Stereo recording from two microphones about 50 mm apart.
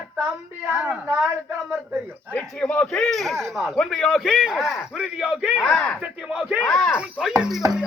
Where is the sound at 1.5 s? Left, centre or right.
Right.